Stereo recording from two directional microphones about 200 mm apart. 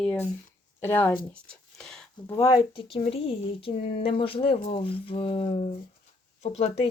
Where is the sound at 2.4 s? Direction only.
20° left (ahead or behind).